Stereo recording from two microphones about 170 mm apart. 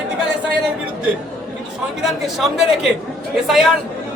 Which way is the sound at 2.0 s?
Centre (ahead or behind).